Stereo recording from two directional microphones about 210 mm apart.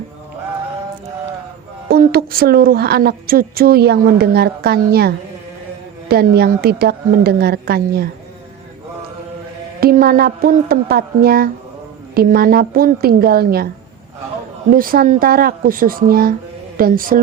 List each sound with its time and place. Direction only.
1.9 s a woman's voice: 45° right (ahead or behind)
9.8 s a woman's voice: 45° right (ahead or behind)
14.7 s a woman's voice: 45° right (ahead or behind)